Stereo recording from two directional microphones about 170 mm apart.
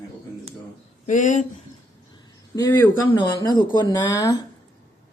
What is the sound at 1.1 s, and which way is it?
Speech, 45° left (ahead or behind).